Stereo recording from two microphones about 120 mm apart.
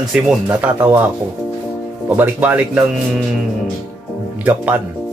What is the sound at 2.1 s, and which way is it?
Speech, 15° right (ahead or behind).